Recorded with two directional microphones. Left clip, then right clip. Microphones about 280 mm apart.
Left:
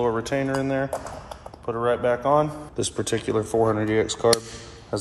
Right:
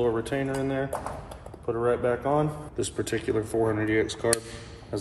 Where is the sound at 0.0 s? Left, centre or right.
Left.